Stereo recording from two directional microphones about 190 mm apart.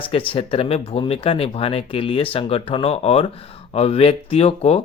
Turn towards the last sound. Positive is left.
turn(degrees=30)  # may be behind; listen again after turning